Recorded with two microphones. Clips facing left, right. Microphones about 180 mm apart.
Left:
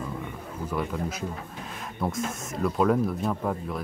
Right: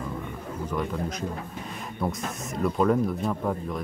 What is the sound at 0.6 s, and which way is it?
Speech, 5° left (ahead or behind).